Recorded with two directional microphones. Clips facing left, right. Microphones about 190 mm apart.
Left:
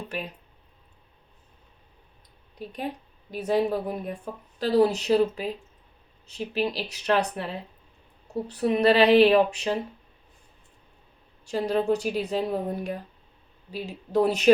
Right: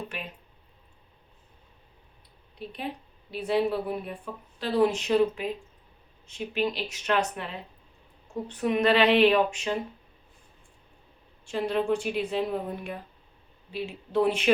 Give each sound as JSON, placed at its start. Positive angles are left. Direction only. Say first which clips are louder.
{"t": 2.6, "sound": "a woman's voice", "louder": "left 2 dB", "side_deg": 40}
{"t": 11.4, "sound": "a woman's voice", "louder": "left 2 dB", "side_deg": 40}